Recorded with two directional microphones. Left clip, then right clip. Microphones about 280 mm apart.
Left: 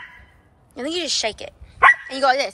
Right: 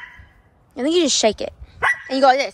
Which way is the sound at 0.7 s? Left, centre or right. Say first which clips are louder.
Right 6 dB; centre.